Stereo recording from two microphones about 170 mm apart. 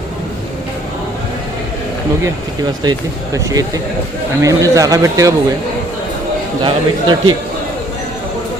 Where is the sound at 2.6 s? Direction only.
25° right (ahead or behind).